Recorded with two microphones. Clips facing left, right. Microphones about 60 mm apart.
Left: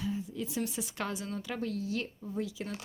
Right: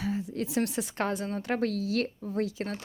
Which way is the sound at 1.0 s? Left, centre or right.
Right.